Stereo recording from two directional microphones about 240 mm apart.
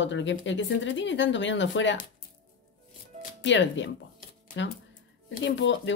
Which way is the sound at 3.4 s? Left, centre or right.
Left.